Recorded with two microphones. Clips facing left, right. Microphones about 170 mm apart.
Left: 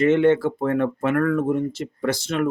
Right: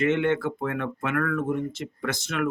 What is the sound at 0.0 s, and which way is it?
Speech, 35° left (ahead or behind).